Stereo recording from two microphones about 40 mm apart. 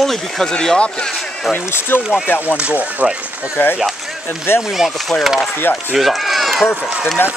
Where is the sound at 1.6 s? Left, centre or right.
Left.